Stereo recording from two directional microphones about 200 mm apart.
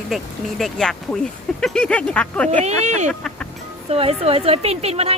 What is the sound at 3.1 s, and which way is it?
Music, 5° left (ahead or behind).